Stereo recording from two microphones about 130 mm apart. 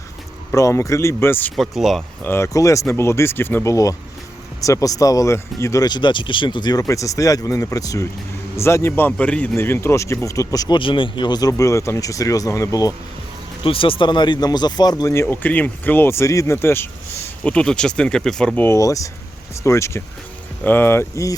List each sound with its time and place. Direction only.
0.5 s speech: 25° left (ahead or behind)
1.5 s speech: centre (ahead or behind)
2.2 s speech: 20° left (ahead or behind)
10.8 s speech: 40° left (ahead or behind); by 12.9 s 25° left (ahead or behind)
13.7 s speech: 45° left (ahead or behind); by 21.3 s 20° left (ahead or behind)